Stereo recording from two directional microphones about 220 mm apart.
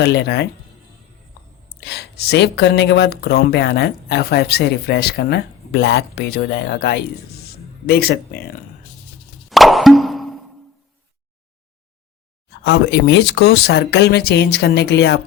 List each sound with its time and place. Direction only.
0.0 s speech: 50° left (ahead or behind)
1.9 s speech: 45° left (ahead or behind)
9.5 s plop: centre (ahead or behind)
12.6 s speech: 50° left (ahead or behind)